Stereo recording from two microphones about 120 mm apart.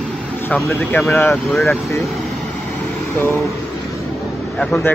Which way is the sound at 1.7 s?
20° left (ahead or behind).